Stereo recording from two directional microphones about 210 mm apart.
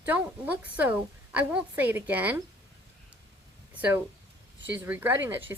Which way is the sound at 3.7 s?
5° right (ahead or behind).